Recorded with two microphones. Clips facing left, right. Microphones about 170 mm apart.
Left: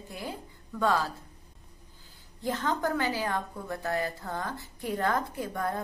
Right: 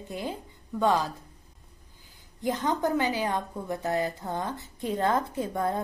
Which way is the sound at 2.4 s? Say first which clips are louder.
Right 3 dB; 20° right (ahead or behind).